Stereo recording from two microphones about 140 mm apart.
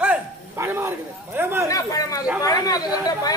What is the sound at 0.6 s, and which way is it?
Speech, 15° right (ahead or behind).